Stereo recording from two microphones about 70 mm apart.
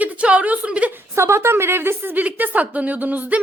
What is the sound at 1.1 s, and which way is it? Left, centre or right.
A woman's voice, right.